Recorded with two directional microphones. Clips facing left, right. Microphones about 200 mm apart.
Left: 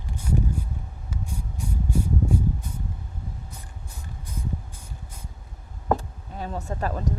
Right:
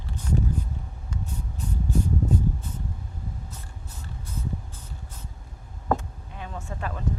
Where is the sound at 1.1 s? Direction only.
10° left (ahead or behind).